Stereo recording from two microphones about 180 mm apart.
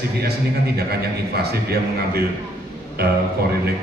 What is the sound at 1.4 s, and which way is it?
Speech, 60° right (ahead or behind).